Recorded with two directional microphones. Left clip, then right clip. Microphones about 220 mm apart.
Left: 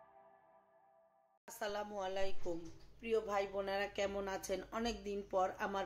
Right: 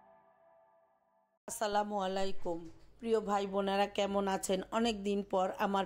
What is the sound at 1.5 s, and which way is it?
Speech, 40° right (ahead or behind).